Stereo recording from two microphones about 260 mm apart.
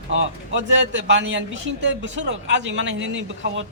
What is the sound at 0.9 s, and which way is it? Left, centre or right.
Speech, right.